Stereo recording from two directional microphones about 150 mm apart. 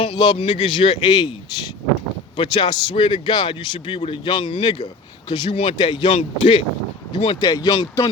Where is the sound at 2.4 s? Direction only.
30° left (ahead or behind).